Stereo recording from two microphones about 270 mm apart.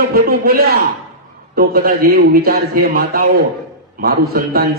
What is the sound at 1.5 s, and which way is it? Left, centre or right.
A man's voice, right.